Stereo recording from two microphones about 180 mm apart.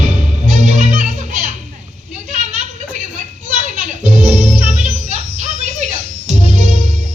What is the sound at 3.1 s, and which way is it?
Music, 45° right (ahead or behind).